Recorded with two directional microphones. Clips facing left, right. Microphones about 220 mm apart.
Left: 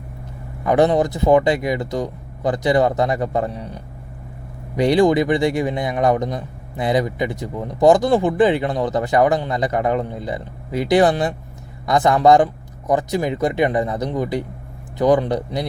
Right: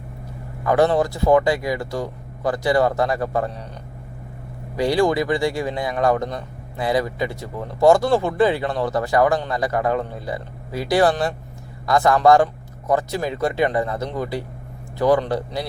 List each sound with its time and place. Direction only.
0.6 s a man's voice: 20° left (ahead or behind)
4.8 s a man's voice: 20° left (ahead or behind)